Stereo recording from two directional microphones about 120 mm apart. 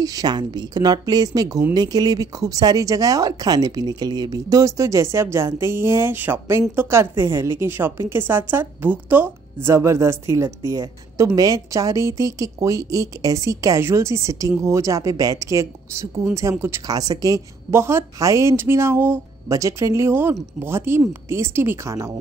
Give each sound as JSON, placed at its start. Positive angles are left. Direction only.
{"t": 0.0, "sound": "speech", "side_deg": -30}